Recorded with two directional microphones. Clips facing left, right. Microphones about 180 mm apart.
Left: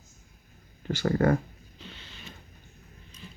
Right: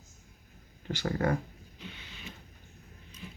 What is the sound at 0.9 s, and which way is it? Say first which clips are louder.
Speech: left 6 dB; 50° left (ahead or behind).